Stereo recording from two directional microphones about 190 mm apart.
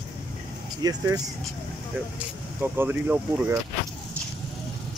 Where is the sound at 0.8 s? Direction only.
20° right (ahead or behind).